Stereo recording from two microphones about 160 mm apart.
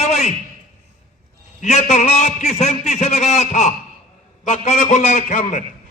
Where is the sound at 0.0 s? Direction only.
45° left (ahead or behind).